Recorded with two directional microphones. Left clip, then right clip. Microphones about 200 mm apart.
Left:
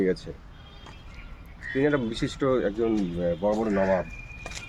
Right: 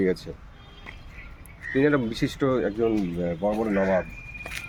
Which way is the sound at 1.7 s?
50° right (ahead or behind).